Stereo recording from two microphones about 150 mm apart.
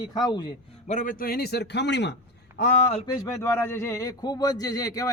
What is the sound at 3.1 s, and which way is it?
Speech, 15° left (ahead or behind).